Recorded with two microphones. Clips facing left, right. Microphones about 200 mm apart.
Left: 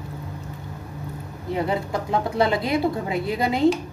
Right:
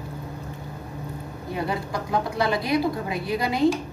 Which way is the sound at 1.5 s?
25° left (ahead or behind).